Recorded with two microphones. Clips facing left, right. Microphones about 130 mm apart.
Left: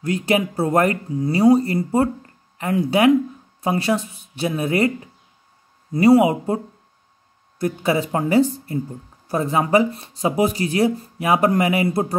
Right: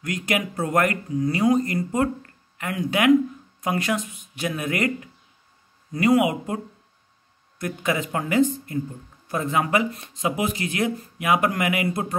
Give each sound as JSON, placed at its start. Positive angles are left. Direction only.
{"t": 0.0, "sound": "speech", "side_deg": 30}